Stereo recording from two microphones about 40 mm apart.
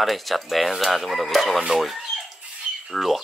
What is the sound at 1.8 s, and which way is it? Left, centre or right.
Chicken, centre.